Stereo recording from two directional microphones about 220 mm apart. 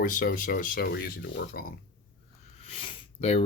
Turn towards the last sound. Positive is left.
turn(degrees=25)  # may be behind; listen again after turning